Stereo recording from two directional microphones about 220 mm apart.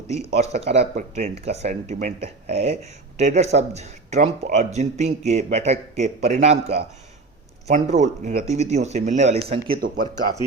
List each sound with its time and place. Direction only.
0.5 s speech: 30° right (ahead or behind)